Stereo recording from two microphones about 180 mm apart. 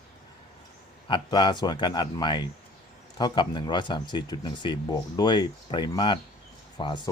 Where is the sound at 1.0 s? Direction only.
25° left (ahead or behind).